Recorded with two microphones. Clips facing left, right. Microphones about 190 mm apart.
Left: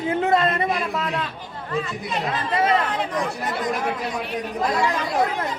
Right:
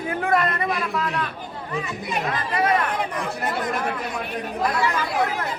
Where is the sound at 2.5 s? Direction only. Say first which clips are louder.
Left 1 dB; 25° left (ahead or behind).